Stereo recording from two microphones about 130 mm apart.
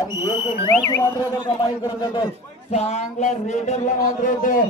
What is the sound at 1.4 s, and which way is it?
Speech, 35° left (ahead or behind).